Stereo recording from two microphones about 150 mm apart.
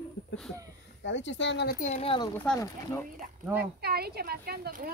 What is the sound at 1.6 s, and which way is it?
Speech, 90° left.